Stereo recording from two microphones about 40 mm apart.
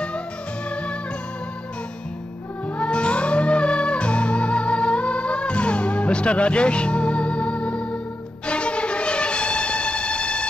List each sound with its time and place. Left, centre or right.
0.7 s music: left
2.8 s music: left